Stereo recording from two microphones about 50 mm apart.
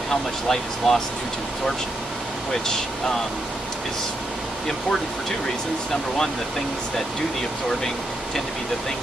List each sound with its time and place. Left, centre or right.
0.1 s speech: centre